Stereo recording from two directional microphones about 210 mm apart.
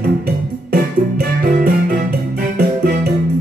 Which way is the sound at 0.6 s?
45° right (ahead or behind).